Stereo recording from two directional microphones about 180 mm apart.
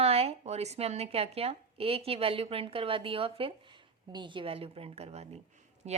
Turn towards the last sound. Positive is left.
turn(degrees=-40)  # may be behind; listen again after turning